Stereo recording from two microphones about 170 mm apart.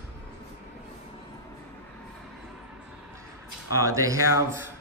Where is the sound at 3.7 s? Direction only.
20° right (ahead or behind).